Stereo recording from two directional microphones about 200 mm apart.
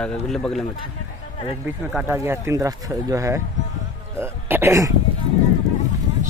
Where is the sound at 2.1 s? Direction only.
15° right (ahead or behind).